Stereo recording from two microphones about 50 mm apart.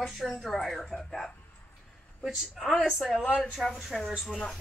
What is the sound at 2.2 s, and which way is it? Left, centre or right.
Speech, centre.